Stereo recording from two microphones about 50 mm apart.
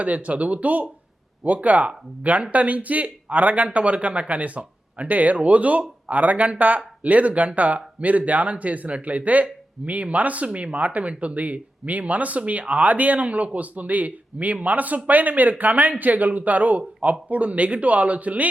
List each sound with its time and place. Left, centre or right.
0.0 s speech: right